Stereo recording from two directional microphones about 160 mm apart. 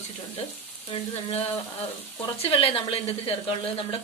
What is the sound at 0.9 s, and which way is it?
Speech, 40° left (ahead or behind).